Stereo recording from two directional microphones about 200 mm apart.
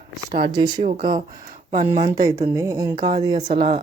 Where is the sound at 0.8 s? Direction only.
35° right (ahead or behind).